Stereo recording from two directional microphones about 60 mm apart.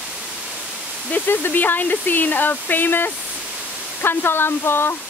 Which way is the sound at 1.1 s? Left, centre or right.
Left.